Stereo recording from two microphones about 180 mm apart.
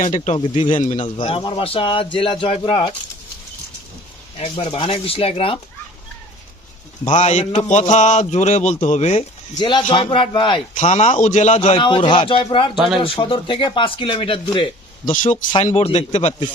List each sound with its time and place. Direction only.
0.0 s a man's voice: 40° left (ahead or behind)
0.3 s a man's voice: 30° left (ahead or behind)
4.4 s a man's voice: 30° left (ahead or behind)
7.0 s a man's voice: 40° left (ahead or behind)
9.6 s a man's voice: 25° left (ahead or behind)
10.8 s a man's voice: 40° left (ahead or behind)
15.0 s a man's voice: 45° left (ahead or behind)
15.6 s a man's voice: 35° left (ahead or behind)